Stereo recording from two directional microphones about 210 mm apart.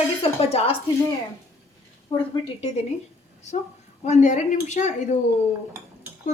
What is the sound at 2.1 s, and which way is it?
Speech, 15° left (ahead or behind).